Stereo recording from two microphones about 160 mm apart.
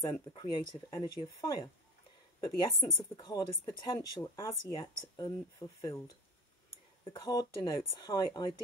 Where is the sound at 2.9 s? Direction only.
25° left (ahead or behind).